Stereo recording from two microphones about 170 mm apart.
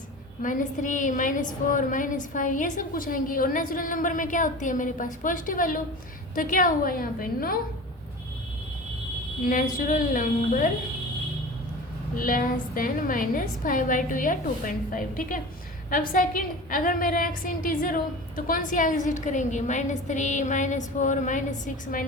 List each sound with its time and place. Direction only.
0.4 s a woman's voice: 50° left (ahead or behind)
9.4 s a woman's voice: 55° left (ahead or behind)
12.1 s a woman's voice: 55° left (ahead or behind)